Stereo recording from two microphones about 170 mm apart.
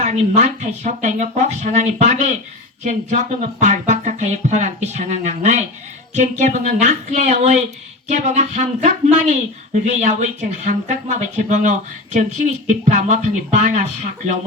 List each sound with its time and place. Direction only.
0.0 s speech: 45° right (ahead or behind)